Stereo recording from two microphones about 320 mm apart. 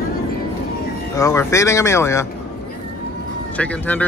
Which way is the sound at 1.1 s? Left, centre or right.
Centre.